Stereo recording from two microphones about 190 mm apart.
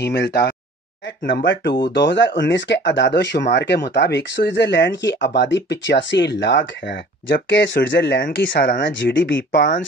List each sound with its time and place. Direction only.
0.0 s speech: 60° left (ahead or behind)
9.5 s speech: 45° left (ahead or behind)